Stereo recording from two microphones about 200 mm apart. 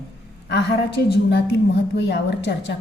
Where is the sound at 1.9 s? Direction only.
60° left (ahead or behind).